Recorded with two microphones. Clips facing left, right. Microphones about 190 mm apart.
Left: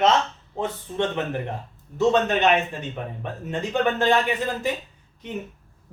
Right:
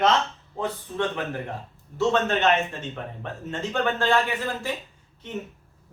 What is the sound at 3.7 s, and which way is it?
Speech, 20° left (ahead or behind).